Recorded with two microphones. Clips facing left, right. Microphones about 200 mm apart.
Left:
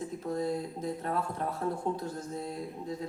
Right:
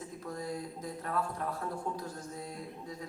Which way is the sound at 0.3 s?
25° left (ahead or behind).